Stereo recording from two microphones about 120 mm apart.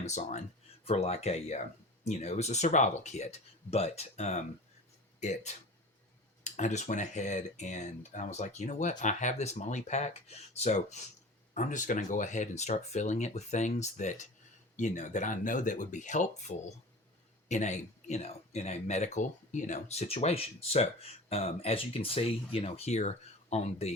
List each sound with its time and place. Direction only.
0.0 s speech: 75° left (ahead or behind)
0.9 s speech: 60° left (ahead or behind)
3.7 s speech: 60° left (ahead or behind)
11.5 s speech: 90° left; by 23.9 s 65° left (ahead or behind)